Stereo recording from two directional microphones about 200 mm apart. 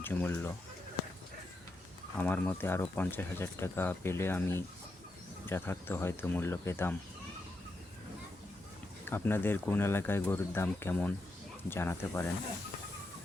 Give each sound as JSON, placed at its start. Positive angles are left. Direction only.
{"t": 0.0, "sound": "speech", "side_deg": 10}
{"t": 2.1, "sound": "speech", "side_deg": 10}
{"t": 9.0, "sound": "speech", "side_deg": 10}